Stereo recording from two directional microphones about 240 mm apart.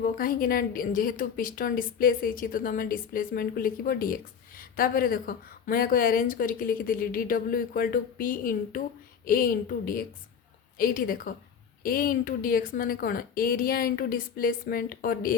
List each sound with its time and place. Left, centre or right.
0.0 s a woman's voice: left